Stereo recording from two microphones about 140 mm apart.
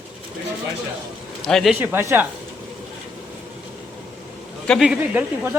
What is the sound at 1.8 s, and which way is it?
Speech, 15° right (ahead or behind).